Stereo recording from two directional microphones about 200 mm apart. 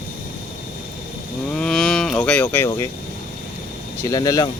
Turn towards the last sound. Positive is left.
turn(degrees=20)  # may be behind; listen again after turning